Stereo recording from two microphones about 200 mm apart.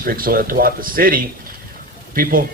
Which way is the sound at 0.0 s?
45° right (ahead or behind).